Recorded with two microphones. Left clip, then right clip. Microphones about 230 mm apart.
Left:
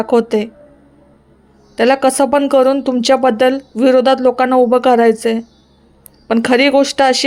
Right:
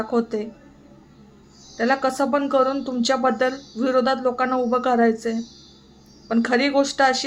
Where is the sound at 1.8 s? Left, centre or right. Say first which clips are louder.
Left 9 dB; left.